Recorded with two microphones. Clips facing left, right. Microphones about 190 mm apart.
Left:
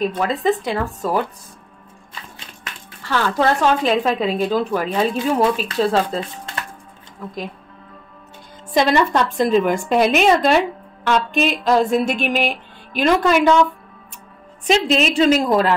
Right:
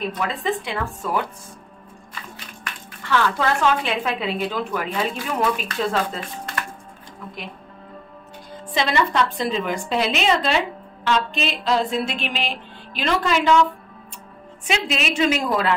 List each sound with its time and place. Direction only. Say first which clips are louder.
0.3 s a woman's voice: left 6 dB; 40° left (ahead or behind)
2.7 s a sound: even; 25° left (ahead or behind)
3.0 s a woman's voice: left 2 dB; 35° left (ahead or behind)
8.7 s a woman's voice: left 5 dB; 45° left (ahead or behind)
14.7 s a woman's voice: left 7 dB; 40° left (ahead or behind)